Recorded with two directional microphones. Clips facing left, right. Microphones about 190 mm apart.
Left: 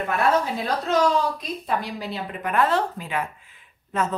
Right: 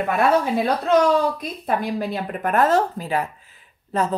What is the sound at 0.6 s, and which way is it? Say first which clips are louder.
Speech: right 4 dB; 60° right (ahead or behind).